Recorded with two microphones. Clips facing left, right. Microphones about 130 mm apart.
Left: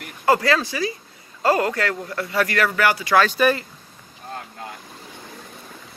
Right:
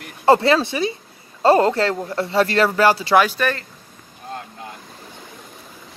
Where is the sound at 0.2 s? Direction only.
25° right (ahead or behind).